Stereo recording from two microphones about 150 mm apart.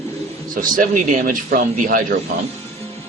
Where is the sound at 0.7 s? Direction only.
60° right (ahead or behind).